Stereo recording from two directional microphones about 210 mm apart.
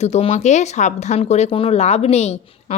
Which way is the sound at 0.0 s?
30° left (ahead or behind).